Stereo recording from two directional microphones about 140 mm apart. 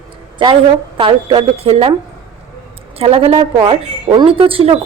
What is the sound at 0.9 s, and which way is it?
Speech, 35° right (ahead or behind).